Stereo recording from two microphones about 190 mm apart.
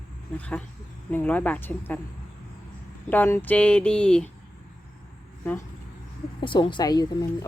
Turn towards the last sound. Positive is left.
turn(degrees=20)  # may be behind; listen again after turning